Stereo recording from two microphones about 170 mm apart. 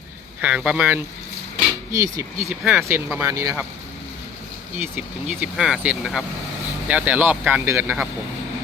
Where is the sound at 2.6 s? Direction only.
5° right (ahead or behind).